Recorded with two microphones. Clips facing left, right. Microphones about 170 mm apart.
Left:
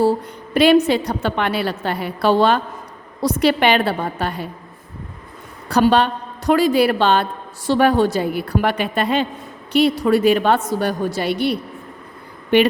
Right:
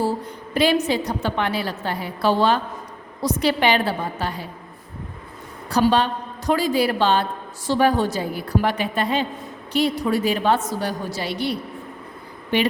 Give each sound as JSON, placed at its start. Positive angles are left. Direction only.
{"t": 0.5, "sound": "a woman's voice", "side_deg": 65}
{"t": 5.6, "sound": "a woman's voice", "side_deg": 65}